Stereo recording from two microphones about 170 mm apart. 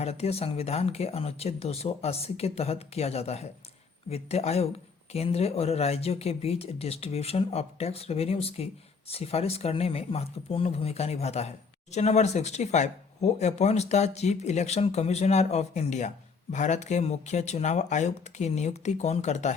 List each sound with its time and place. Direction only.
0.0 s speech: 40° left (ahead or behind)